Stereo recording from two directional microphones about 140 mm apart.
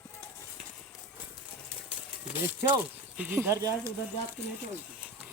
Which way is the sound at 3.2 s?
15° right (ahead or behind).